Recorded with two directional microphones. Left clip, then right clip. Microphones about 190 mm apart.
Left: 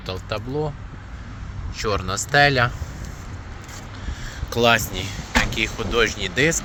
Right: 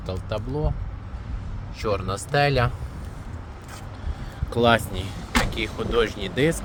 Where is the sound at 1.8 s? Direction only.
10° left (ahead or behind).